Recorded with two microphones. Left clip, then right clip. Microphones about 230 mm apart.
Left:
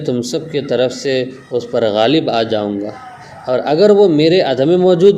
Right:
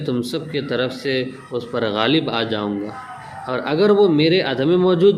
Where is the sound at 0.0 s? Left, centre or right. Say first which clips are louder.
Left 5 dB; centre.